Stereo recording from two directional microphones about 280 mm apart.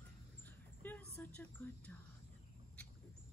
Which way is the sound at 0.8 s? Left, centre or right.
Centre.